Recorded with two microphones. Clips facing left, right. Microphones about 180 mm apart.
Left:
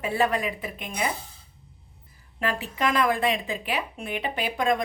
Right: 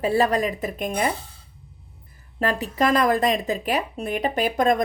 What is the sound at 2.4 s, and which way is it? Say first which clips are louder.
Speech: right 5 dB; 40° right (ahead or behind).